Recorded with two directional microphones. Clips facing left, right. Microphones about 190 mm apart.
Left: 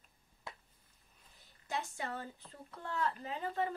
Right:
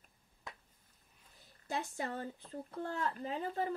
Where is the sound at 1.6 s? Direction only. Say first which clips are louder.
Right 1 dB; 35° right (ahead or behind).